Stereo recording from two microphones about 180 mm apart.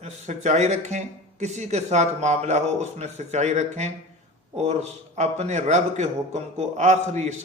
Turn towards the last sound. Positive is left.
turn(degrees=-40)  # may be behind; listen again after turning